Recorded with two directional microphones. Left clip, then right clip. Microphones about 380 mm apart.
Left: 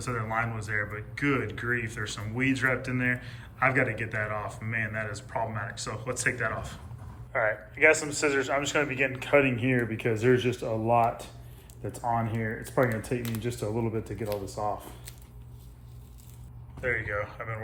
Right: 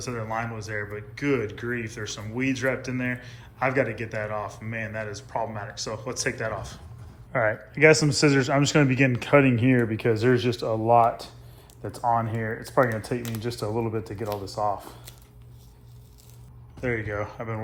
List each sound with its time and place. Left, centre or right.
0.0 s speech: centre
7.3 s speech: right
16.8 s speech: centre